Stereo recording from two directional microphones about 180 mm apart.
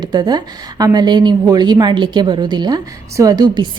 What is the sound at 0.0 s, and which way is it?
A woman's voice, 25° right (ahead or behind).